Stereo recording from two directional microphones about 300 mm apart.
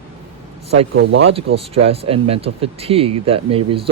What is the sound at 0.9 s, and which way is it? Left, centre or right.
Speech, right.